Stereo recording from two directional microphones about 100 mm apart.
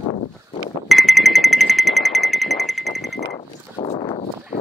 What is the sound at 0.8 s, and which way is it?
Music, centre (ahead or behind).